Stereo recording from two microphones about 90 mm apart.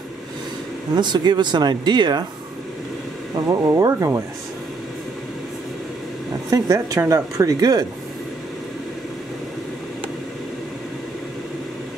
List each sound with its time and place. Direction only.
0.9 s speech: 55° right (ahead or behind)
3.3 s speech: 45° right (ahead or behind)
6.5 s speech: 40° right (ahead or behind)